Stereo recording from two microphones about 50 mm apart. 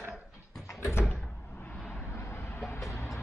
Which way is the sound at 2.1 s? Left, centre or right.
Left.